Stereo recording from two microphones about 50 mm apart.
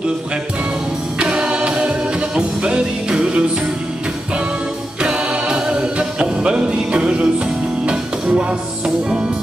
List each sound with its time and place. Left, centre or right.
1.2 s music: centre
5.0 s music: centre